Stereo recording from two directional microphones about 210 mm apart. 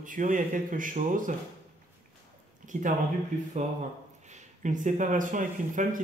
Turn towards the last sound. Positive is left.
turn(degrees=-40)  # may be behind; listen again after turning